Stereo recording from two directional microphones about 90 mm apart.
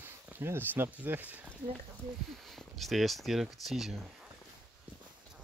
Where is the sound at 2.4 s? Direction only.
Centre (ahead or behind).